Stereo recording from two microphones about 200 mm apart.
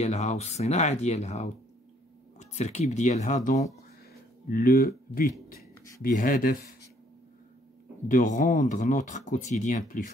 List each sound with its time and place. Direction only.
0.0 s speech: 35° left (ahead or behind)
8.1 s speech: 40° left (ahead or behind)